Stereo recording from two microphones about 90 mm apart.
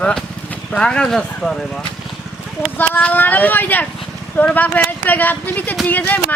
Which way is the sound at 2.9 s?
20° left (ahead or behind).